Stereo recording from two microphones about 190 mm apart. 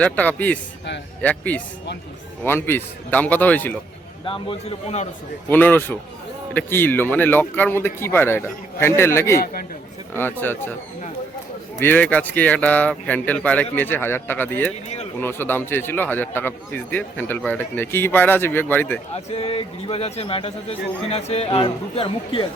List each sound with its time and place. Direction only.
0.0 s a man's voice: 10° left (ahead or behind)
4.3 s speech: 30° left (ahead or behind)
5.5 s a man's voice: 10° left (ahead or behind)
9.4 s a man's voice: 50° left (ahead or behind)
10.2 s a man's voice: 10° left (ahead or behind)
11.8 s a man's voice: 10° left (ahead or behind)
19.1 s speech: 30° left (ahead or behind)